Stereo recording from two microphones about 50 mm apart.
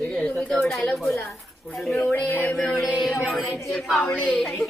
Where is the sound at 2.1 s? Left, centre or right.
Left.